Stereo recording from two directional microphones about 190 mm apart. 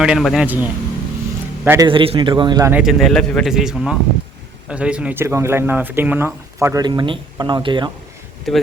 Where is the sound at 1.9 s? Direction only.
25° right (ahead or behind).